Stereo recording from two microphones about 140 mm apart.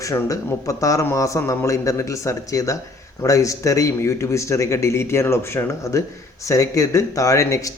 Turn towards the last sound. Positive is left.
turn(degrees=25)  # may be behind; listen again after turning